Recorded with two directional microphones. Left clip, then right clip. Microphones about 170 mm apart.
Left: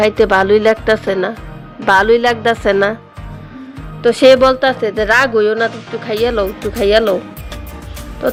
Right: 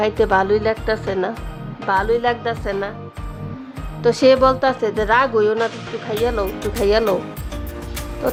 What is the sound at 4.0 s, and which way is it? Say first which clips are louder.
Speech: left 5 dB; 10° left (ahead or behind).